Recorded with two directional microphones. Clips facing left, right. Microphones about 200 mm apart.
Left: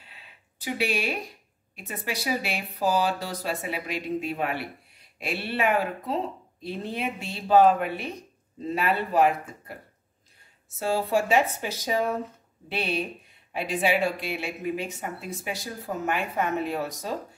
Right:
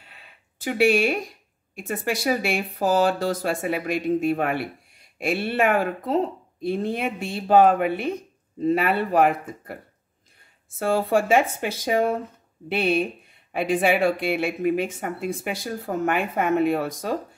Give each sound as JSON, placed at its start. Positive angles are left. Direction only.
{"t": 0.0, "sound": "a sound", "side_deg": -50}
{"t": 1.8, "sound": "speech", "side_deg": -50}
{"t": 10.8, "sound": "speech", "side_deg": -55}